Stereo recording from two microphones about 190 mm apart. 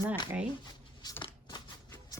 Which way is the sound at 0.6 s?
20° left (ahead or behind).